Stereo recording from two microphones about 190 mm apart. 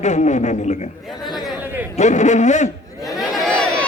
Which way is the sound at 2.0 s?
40° left (ahead or behind).